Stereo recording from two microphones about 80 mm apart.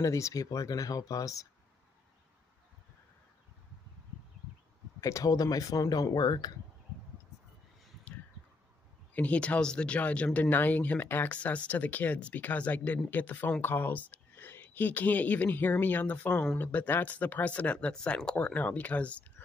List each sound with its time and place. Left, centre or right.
0.0 s speech: left
5.0 s speech: left
9.1 s speech: centre